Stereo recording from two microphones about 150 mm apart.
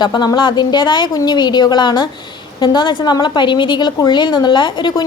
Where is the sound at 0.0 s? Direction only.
30° left (ahead or behind).